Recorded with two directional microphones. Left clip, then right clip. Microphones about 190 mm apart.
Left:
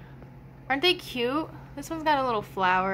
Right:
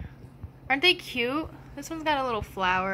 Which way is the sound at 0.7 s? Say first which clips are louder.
Right 2 dB; 5° right (ahead or behind).